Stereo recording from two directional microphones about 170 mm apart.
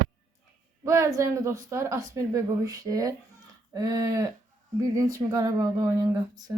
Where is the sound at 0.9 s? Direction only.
15° right (ahead or behind).